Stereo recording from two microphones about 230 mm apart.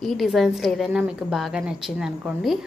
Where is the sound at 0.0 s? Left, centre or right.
Centre.